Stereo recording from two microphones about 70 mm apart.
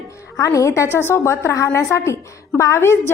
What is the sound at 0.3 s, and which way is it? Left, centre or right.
A woman's voice, left.